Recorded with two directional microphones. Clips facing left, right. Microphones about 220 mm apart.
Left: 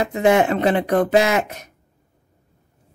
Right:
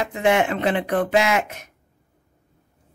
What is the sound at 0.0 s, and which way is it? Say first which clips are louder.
A woman's voice: left 4 dB; 40° left (ahead or behind).